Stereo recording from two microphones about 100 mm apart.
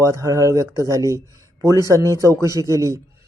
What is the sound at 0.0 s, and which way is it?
Speech, 30° right (ahead or behind).